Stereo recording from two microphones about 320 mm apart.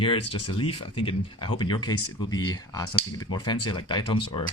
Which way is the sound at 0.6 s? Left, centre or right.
Centre.